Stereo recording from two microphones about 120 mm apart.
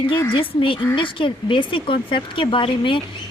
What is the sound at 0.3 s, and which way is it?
A woman's voice, 45° left (ahead or behind).